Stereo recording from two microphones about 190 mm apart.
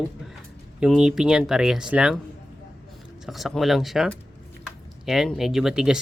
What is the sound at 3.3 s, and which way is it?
Speech, centre (ahead or behind).